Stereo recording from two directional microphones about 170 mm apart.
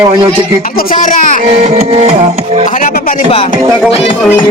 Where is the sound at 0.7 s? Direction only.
55° left (ahead or behind).